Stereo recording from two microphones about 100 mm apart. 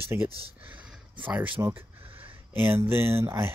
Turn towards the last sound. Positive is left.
turn(degrees=-25)  # may be behind; listen again after turning